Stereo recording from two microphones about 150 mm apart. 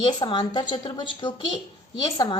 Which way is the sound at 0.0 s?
35° left (ahead or behind).